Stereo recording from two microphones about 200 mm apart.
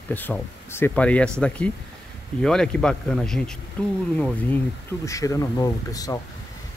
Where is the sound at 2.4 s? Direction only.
5° left (ahead or behind).